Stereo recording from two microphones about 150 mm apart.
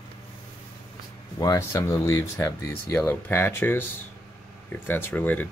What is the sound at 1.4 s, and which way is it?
Speech, 25° left (ahead or behind).